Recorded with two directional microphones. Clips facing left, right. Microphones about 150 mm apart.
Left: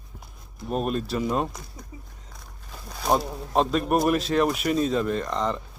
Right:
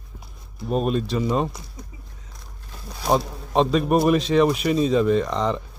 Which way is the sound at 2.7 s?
Centre (ahead or behind).